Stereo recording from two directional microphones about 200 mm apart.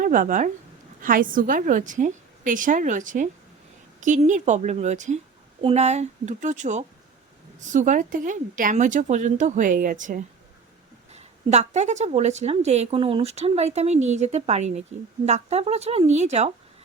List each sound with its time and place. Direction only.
0.0 s a woman's voice: 40° right (ahead or behind)